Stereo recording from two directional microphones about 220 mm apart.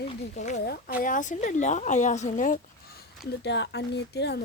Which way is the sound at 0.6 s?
45° left (ahead or behind).